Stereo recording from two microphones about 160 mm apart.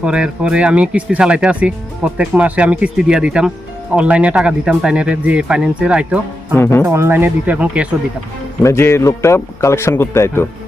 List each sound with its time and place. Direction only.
0.0 s speech: 5° right (ahead or behind)
6.6 s a man's voice: 15° left (ahead or behind)
6.8 s speech: 15° right (ahead or behind)
8.6 s a man's voice: 15° left (ahead or behind)